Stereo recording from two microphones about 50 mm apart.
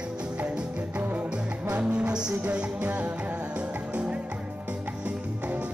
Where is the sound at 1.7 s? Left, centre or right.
Right.